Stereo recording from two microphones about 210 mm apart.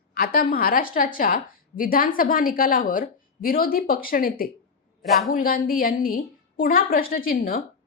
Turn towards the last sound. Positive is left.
turn(degrees=45)  # may be behind; listen again after turning